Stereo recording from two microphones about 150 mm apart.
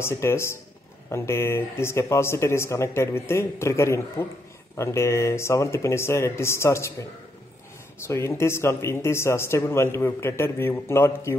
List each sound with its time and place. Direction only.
0.0 s speech: 15° left (ahead or behind)
8.1 s speech: 20° left (ahead or behind)